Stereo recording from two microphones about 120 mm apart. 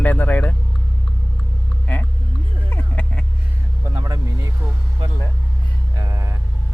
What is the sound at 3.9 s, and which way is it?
Vehicle, 35° right (ahead or behind).